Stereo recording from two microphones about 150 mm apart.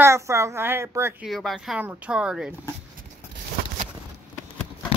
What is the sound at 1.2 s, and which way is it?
Speech, centre (ahead or behind).